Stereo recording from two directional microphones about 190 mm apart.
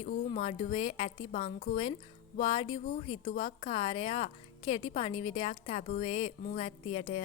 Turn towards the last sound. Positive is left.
turn(degrees=30)  # may be behind; listen again after turning